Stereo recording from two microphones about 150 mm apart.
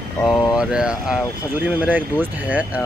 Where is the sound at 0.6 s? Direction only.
5° right (ahead or behind).